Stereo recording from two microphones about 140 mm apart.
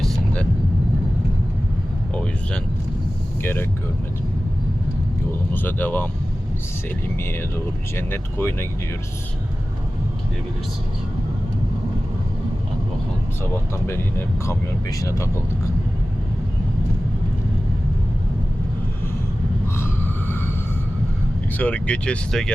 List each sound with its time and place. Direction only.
3.4 s speech: 15° left (ahead or behind)
5.5 s speech: 15° left (ahead or behind)
7.9 s speech: 15° left (ahead or behind)
13.4 s speech: 20° left (ahead or behind)
19.6 s a sound: 15° left (ahead or behind)
21.6 s speech: 10° left (ahead or behind)